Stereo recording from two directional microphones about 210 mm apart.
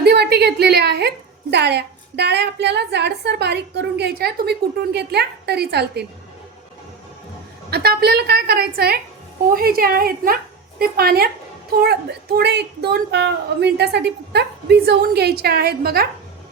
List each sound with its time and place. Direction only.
0.0 s a woman's voice: 50° right (ahead or behind)
7.7 s a woman's voice: 50° right (ahead or behind)